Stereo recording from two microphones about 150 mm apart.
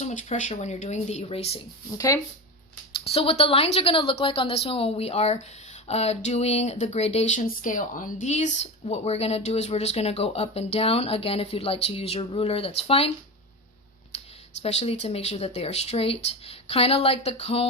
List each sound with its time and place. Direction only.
0.0 s speech: 50° left (ahead or behind)
2.0 s speech: 20° left (ahead or behind)
3.0 s a woman's voice: 40° left (ahead or behind)
7.4 s speech: 65° left (ahead or behind); by 13.1 s 40° left (ahead or behind)
14.1 s a sound: 45° left (ahead or behind)
14.6 s speech: 45° left (ahead or behind)